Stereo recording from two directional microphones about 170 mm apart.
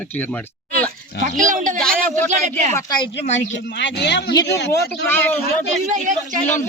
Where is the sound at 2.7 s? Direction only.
25° left (ahead or behind).